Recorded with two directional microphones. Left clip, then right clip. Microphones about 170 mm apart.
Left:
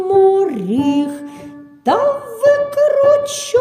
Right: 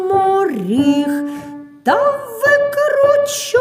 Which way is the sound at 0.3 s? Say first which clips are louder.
Left 1 dB; 20° left (ahead or behind).